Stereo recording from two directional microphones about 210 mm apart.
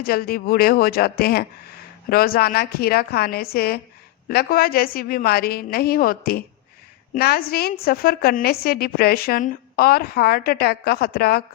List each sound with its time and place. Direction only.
0.0 s a woman's voice: 45° left (ahead or behind)